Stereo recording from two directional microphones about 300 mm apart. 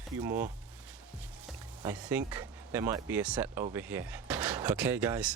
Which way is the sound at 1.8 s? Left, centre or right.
Centre.